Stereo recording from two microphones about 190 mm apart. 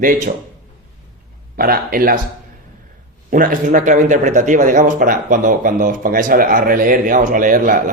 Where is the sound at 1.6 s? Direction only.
50° right (ahead or behind).